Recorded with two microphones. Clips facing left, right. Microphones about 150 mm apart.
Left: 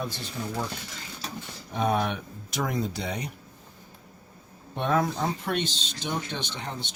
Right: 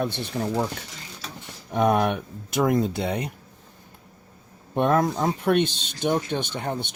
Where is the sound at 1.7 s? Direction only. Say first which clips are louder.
Right 5 dB; 60° right (ahead or behind).